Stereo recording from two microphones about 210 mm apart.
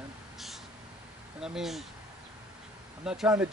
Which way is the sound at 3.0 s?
5° right (ahead or behind).